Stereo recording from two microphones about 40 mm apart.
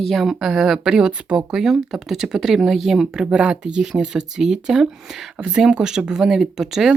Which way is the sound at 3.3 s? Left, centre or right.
Right.